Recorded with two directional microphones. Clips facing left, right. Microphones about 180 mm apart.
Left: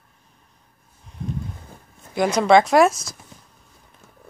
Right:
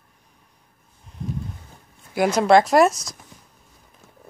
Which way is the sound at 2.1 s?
5° right (ahead or behind).